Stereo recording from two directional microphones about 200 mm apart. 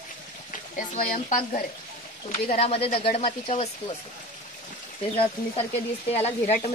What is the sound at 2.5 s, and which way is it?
Speech, 30° left (ahead or behind).